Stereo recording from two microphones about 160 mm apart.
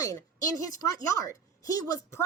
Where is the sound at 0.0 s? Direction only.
20° left (ahead or behind).